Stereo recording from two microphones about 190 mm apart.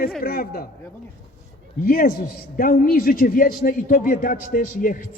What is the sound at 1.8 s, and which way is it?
A man's voice, 45° left (ahead or behind).